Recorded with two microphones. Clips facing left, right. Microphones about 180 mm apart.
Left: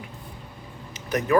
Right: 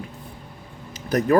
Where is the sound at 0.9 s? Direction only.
35° right (ahead or behind).